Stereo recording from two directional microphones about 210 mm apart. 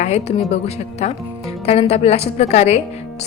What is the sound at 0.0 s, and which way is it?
A woman's voice, 30° left (ahead or behind).